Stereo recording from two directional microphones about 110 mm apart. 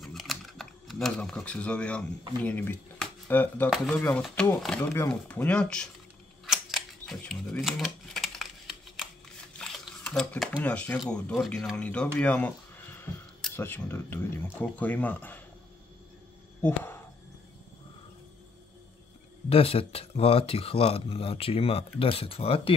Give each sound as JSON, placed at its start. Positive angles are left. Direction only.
{"t": 0.0, "sound": "speech", "side_deg": 0}
{"t": 6.4, "sound": "camera", "side_deg": 0}
{"t": 7.2, "sound": "typing", "side_deg": 5}
{"t": 9.6, "sound": "camera", "side_deg": 5}
{"t": 11.1, "sound": "speech", "side_deg": 10}
{"t": 16.6, "sound": "a sound", "side_deg": 20}
{"t": 19.5, "sound": "speech", "side_deg": 60}